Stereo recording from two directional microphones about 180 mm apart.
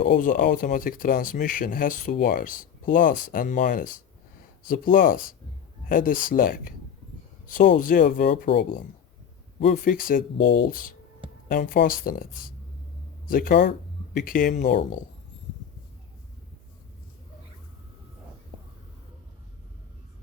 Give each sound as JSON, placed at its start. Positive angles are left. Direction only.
{"t": 0.0, "sound": "speech", "side_deg": 50}
{"t": 9.6, "sound": "speech", "side_deg": 50}